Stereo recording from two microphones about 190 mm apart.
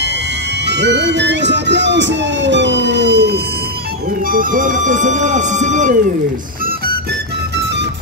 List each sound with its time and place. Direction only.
0.7 s speech: 65° right (ahead or behind)
4.3 s speech: 45° right (ahead or behind)